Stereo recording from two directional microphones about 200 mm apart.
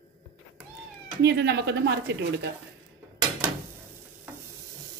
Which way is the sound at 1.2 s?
60° right (ahead or behind).